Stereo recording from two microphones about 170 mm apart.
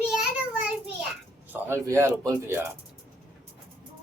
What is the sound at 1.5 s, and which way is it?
Speech, 15° right (ahead or behind).